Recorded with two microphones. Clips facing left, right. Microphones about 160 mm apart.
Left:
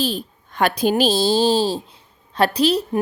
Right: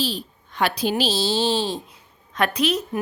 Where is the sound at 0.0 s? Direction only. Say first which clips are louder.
Left 3 dB; 50° left (ahead or behind).